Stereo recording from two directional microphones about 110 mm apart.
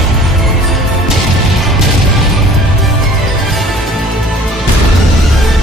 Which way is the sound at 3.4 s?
Centre (ahead or behind).